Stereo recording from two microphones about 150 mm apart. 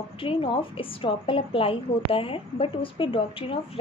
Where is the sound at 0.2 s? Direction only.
35° left (ahead or behind).